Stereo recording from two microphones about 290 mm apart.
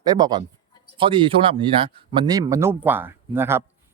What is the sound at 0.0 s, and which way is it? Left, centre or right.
Speech, centre.